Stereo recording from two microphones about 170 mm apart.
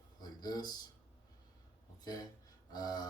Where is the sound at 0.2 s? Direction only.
25° left (ahead or behind).